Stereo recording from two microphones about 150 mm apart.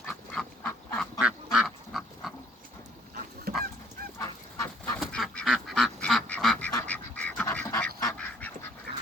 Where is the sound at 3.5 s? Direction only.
90° right.